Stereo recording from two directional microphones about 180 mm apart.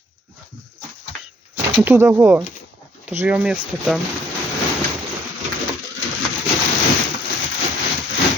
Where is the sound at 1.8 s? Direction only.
15° right (ahead or behind).